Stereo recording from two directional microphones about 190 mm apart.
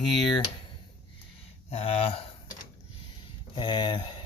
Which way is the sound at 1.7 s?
30° left (ahead or behind).